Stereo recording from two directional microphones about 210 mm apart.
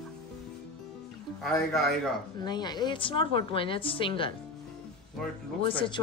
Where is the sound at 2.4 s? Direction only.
20° left (ahead or behind).